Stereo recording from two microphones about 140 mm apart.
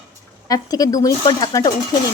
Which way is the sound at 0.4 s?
25° left (ahead or behind).